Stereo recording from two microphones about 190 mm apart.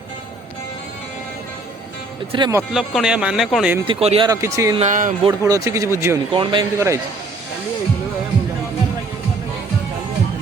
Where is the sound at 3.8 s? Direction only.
30° right (ahead or behind).